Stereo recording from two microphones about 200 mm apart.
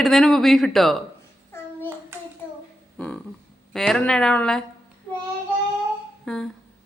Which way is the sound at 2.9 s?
5° left (ahead or behind).